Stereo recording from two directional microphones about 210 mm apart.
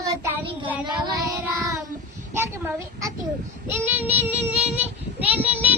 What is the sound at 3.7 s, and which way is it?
Child singing, 10° right (ahead or behind).